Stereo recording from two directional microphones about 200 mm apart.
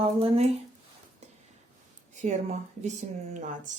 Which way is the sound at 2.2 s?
35° right (ahead or behind).